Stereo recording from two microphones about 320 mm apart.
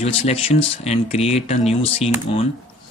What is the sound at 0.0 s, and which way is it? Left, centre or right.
Speech, centre.